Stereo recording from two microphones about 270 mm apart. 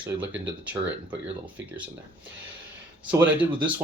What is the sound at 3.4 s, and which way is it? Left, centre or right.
Speech, centre.